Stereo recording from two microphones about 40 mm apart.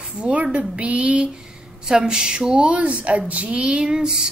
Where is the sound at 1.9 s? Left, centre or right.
Centre.